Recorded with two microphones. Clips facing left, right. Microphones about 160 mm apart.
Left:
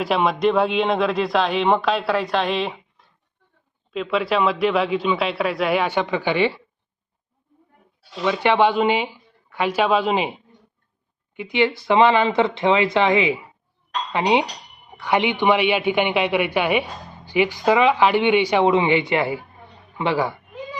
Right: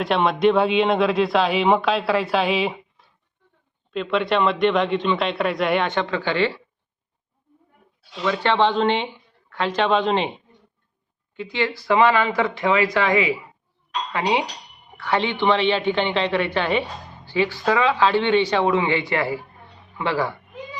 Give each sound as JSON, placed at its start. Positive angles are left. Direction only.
{"t": 0.0, "sound": "a man's voice", "side_deg": 0}
{"t": 8.3, "sound": "a man's voice", "side_deg": 10}
{"t": 11.3, "sound": "a man's voice", "side_deg": 15}